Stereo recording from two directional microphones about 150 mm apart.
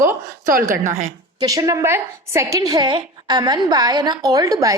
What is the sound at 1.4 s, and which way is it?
A woman's voice, 25° right (ahead or behind).